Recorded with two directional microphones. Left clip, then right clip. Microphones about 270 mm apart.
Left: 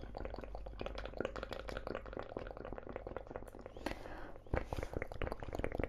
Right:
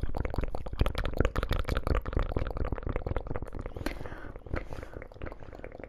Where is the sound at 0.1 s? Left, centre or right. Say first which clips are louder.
Right 10 dB; right.